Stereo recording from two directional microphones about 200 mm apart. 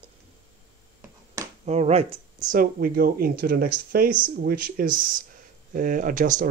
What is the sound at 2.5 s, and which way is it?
Speech, 45° right (ahead or behind).